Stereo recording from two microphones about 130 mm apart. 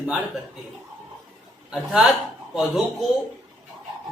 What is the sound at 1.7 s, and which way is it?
Speech, centre (ahead or behind).